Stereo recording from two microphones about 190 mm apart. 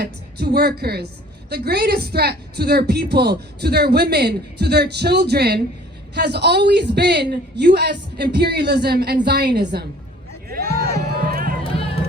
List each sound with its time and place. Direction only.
0.0 s a woman's voice: 55° right (ahead or behind)
10.5 s a sound: 55° right (ahead or behind)
11.6 s run: 30° left (ahead or behind)